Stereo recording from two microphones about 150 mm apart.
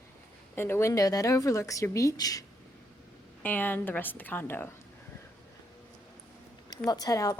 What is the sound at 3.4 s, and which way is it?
A woman's voice, 10° left (ahead or behind).